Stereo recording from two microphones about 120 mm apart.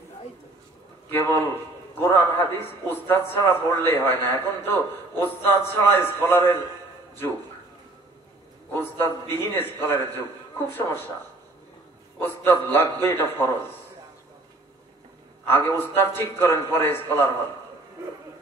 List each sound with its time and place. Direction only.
1.1 s a man's voice: 15° left (ahead or behind)
8.7 s a man's voice: 20° left (ahead or behind)
12.2 s a man's voice: 15° left (ahead or behind)
15.4 s a man's voice: 20° left (ahead or behind)